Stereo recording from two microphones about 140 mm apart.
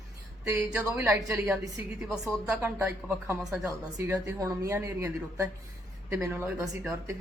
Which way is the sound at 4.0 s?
20° right (ahead or behind).